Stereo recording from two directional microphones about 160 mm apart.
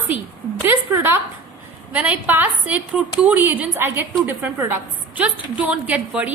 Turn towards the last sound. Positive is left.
turn(degrees=-10)  # may be behind; listen again after turning